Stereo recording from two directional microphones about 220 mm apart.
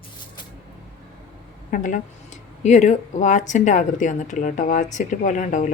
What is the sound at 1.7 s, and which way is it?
Speech, 35° left (ahead or behind).